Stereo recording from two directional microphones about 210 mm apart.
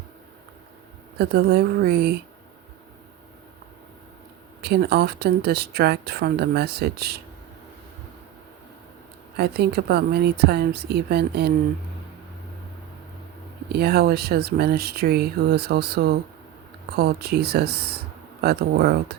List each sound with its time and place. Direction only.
1.2 s speech: 50° right (ahead or behind)
4.6 s speech: 50° right (ahead or behind)
9.4 s speech: 50° right (ahead or behind)
13.7 s speech: 50° right (ahead or behind)